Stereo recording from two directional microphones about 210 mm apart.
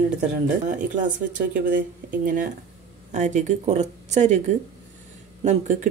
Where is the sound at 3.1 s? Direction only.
35° right (ahead or behind).